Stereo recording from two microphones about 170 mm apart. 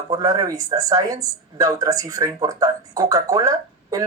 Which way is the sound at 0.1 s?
20° right (ahead or behind).